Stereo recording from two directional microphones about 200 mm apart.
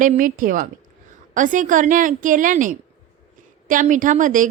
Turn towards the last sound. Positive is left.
turn(degrees=-40)  # may be behind; listen again after turning